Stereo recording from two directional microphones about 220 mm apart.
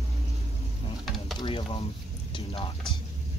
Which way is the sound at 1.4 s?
25° left (ahead or behind).